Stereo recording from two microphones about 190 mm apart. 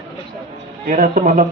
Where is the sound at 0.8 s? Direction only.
40° right (ahead or behind).